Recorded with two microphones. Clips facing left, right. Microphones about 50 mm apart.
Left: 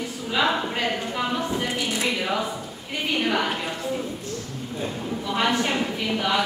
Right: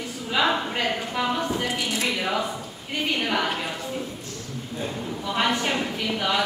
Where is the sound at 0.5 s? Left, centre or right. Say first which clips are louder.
Even; centre.